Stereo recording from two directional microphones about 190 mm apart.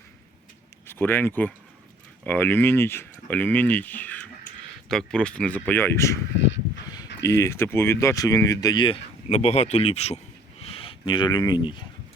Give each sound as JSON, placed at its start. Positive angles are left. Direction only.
{"t": 0.9, "sound": "speech", "side_deg": 10}
{"t": 7.3, "sound": "speech", "side_deg": 15}